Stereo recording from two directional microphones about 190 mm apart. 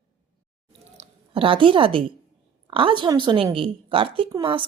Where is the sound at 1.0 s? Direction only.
30° right (ahead or behind).